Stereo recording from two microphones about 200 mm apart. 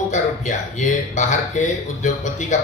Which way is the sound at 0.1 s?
40° left (ahead or behind).